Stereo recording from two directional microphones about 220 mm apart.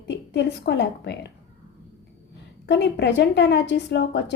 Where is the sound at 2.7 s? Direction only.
50° left (ahead or behind).